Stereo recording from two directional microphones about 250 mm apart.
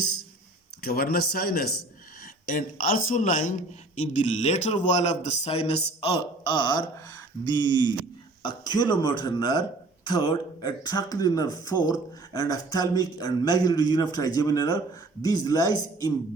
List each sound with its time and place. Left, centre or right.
0.8 s speech: left; by 16.1 s centre